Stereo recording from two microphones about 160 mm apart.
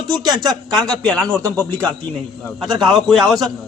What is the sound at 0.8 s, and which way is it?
Speech, 5° left (ahead or behind).